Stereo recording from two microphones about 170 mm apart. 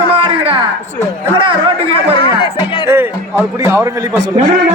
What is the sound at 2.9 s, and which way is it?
A man's voice, 15° right (ahead or behind).